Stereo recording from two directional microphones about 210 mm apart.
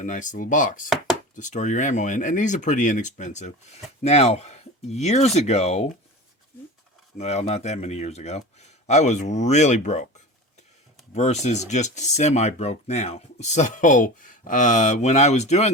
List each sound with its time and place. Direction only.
0.0 s speech: 40° left (ahead or behind)
7.2 s speech: 30° left (ahead or behind)